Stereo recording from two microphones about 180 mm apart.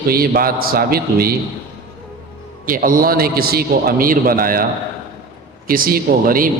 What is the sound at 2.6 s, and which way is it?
A man's voice, 50° right (ahead or behind).